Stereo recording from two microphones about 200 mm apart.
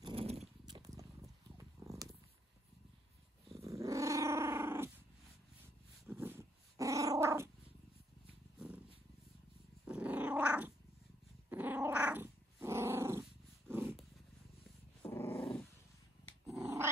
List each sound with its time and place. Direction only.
0.0 s cat: 30° right (ahead or behind)
3.6 s dog: 15° right (ahead or behind)
6.0 s dog: 10° right (ahead or behind)
8.5 s cat: 5° right (ahead or behind)
9.8 s growling: 5° right (ahead or behind)
12.6 s dog: 15° right (ahead or behind)
15.0 s dog: 10° left (ahead or behind)
16.4 s growling: 15° right (ahead or behind)